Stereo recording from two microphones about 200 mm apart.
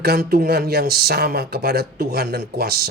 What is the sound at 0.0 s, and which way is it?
Speech, 50° right (ahead or behind).